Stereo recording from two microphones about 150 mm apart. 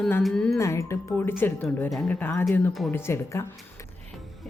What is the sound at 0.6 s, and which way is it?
Speech, 20° left (ahead or behind).